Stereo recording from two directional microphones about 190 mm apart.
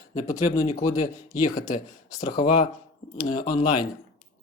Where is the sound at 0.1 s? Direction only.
35° left (ahead or behind).